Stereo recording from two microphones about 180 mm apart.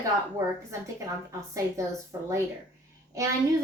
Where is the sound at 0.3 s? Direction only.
15° right (ahead or behind).